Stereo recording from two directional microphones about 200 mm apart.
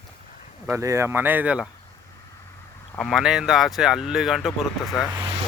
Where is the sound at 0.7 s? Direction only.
15° right (ahead or behind).